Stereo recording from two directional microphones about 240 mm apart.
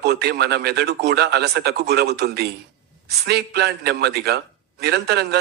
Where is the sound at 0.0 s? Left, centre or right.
Right.